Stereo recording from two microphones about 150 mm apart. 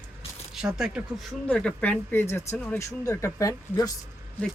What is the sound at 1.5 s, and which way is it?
Speech, 10° left (ahead or behind).